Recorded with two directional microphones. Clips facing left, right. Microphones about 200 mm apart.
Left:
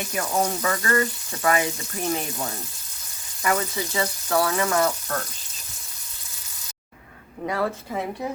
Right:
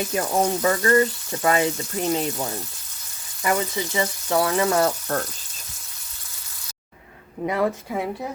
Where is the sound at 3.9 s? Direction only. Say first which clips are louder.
Right 1 dB; 20° right (ahead or behind).